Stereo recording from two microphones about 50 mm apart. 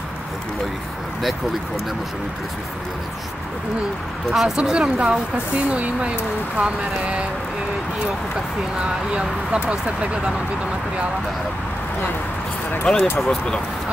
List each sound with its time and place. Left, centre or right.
4.3 s speech: centre
4.6 s speech: centre
8.8 s speech: centre
12.9 s speech: centre